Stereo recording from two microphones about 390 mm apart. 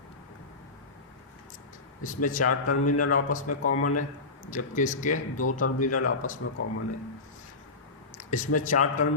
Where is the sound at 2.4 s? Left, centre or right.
Left.